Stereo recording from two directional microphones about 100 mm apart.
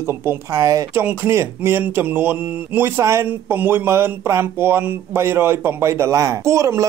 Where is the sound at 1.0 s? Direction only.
25° right (ahead or behind).